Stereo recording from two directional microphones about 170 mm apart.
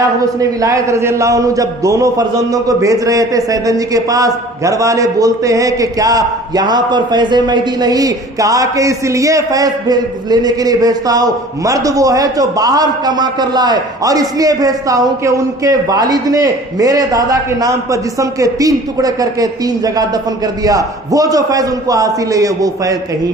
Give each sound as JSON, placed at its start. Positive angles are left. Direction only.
{"t": 0.3, "sound": "a man's voice", "side_deg": -20}